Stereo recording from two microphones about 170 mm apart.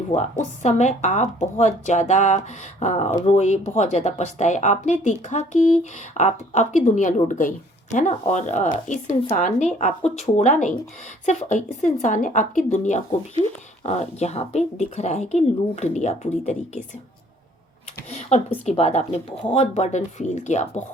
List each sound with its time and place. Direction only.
0.2 s a woman's voice: 45° left (ahead or behind)
18.1 s speech: 40° left (ahead or behind)